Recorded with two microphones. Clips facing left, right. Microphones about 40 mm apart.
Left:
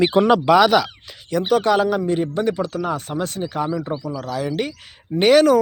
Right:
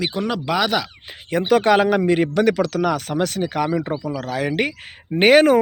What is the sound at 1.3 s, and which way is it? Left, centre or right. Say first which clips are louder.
Speech: right 2 dB; right.